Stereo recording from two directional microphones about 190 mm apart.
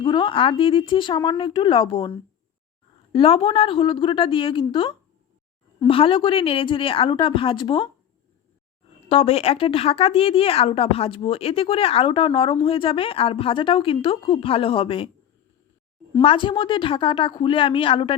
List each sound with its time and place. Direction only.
0.0 s a woman's voice: 25° left (ahead or behind)
9.0 s a woman's voice: 30° left (ahead or behind)
16.2 s a woman's voice: 25° left (ahead or behind)